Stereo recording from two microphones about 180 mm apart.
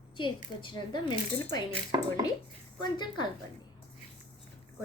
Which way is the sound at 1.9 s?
25° right (ahead or behind).